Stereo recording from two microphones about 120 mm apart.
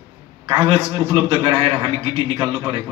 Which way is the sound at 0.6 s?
45° right (ahead or behind).